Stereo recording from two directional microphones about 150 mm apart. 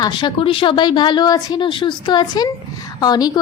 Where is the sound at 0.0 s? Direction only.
30° left (ahead or behind).